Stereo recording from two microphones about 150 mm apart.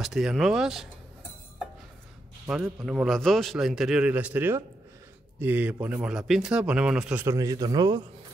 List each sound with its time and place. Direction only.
0.0 s speech: centre (ahead or behind)
2.8 s a man's voice: 5° right (ahead or behind)
7.2 s a man's voice: 20° right (ahead or behind)